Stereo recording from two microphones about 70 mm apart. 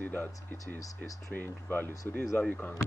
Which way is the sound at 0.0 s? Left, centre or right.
Left.